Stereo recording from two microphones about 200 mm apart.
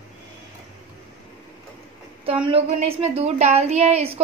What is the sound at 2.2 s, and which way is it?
A woman's voice, 25° right (ahead or behind).